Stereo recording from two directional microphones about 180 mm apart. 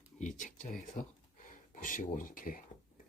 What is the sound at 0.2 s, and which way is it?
Speech, 45° left (ahead or behind).